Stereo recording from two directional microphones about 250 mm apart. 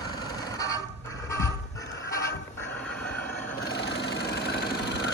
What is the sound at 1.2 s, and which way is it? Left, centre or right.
Music, centre.